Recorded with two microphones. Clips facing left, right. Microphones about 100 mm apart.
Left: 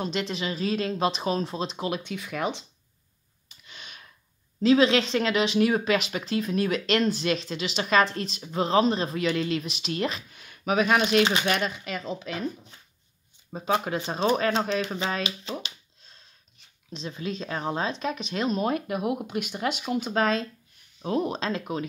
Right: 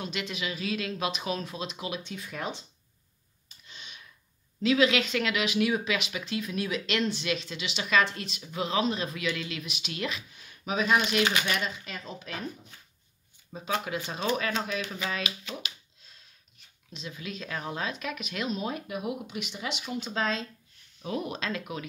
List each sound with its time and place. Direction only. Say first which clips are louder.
0.0 s speech: left 5 dB; 35° left (ahead or behind)
2.0 s speech: left 6 dB; 90° left
3.6 s clicking: left 2 dB; 55° left (ahead or behind)
4.6 s speech: left 4 dB; 35° left (ahead or behind)
10.3 s speech: left 6 dB; 65° left (ahead or behind)
11.8 s speech: left 8 dB; 90° left
13.5 s speech: left 5 dB; 45° left (ahead or behind)
13.8 s speech: left 5 dB; 35° left (ahead or behind)
16.9 s speech: left 6 dB; 35° left (ahead or behind)
18.6 s speech: left 7 dB; 55° left (ahead or behind)
21.0 s speech: left 6 dB; 35° left (ahead or behind)